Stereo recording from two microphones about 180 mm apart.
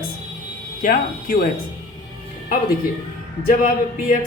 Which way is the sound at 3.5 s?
45° left (ahead or behind).